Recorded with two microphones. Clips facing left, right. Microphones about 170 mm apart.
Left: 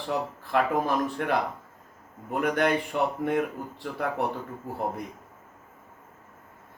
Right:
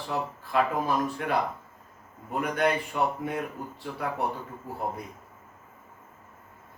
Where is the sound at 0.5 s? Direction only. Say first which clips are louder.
Left 1 dB; 55° left (ahead or behind).